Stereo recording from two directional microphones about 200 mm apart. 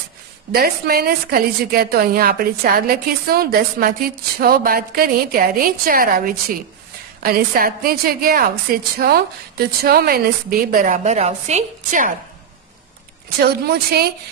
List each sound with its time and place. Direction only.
0.5 s a woman's voice: 50° right (ahead or behind)
13.4 s a woman's voice: 50° right (ahead or behind)